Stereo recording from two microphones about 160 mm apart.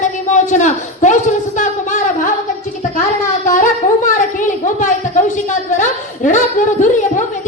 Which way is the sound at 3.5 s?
55° left (ahead or behind).